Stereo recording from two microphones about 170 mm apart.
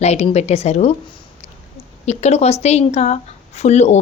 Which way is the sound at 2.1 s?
40° left (ahead or behind).